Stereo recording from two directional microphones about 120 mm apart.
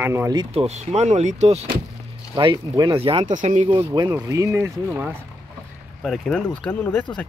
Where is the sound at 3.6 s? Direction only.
40° right (ahead or behind).